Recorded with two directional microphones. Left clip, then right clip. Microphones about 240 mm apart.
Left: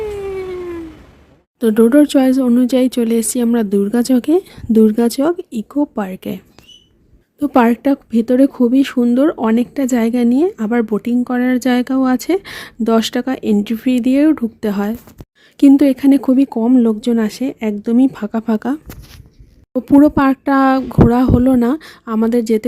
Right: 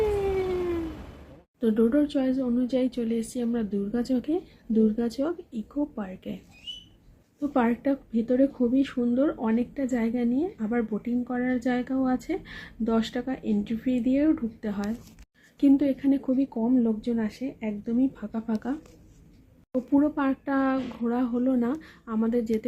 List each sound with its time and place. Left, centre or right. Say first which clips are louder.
0.0 s cat: left 3 dB; centre
1.5 s a woman's voice: left 13 dB; left
20.0 s a woman's voice: left 15 dB; left